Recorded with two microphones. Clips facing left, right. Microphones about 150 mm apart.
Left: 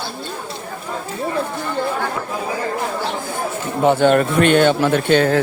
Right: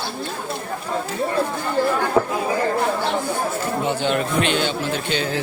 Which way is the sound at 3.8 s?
50° left (ahead or behind).